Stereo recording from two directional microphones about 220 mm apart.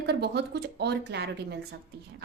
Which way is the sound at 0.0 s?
50° right (ahead or behind).